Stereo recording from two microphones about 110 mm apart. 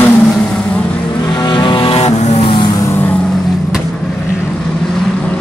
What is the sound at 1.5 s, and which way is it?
Vehicle, 45° left (ahead or behind).